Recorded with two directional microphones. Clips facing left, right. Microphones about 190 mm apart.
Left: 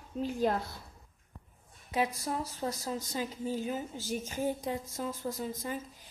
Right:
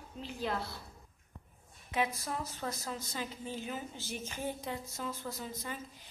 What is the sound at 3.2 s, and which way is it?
A woman's voice, 40° left (ahead or behind).